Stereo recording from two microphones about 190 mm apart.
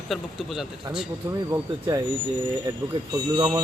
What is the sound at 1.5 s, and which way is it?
Speech, 15° right (ahead or behind).